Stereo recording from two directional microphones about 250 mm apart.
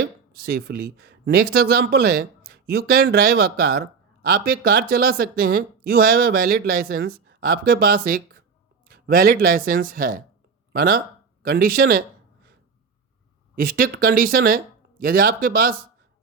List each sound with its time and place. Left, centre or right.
0.0 s speech: right
13.6 s speech: right